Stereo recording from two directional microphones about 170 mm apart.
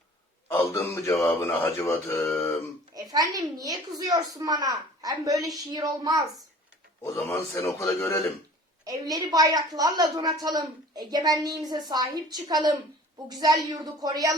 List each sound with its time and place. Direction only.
0.4 s a sound: 15° left (ahead or behind)
1.1 s speech: 10° left (ahead or behind)
2.9 s a woman's voice: 20° right (ahead or behind)
7.0 s speech: 15° left (ahead or behind)
8.8 s a woman's voice: 20° right (ahead or behind)